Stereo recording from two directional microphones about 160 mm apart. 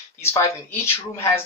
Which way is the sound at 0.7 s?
15° left (ahead or behind).